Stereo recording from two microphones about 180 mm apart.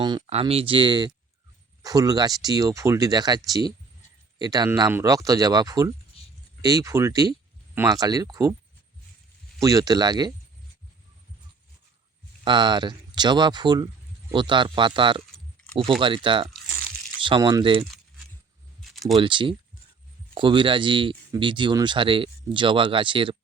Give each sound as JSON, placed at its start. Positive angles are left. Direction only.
{"t": 0.0, "sound": "speech", "side_deg": -30}
{"t": 6.2, "sound": "a sound", "side_deg": 35}
{"t": 6.6, "sound": "speech", "side_deg": -20}
{"t": 9.6, "sound": "speech", "side_deg": -20}
{"t": 12.5, "sound": "speech", "side_deg": -25}
{"t": 18.8, "sound": "a sound", "side_deg": 0}
{"t": 19.1, "sound": "speech", "side_deg": -25}